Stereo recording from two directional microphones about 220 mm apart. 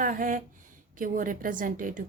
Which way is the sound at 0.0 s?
40° right (ahead or behind).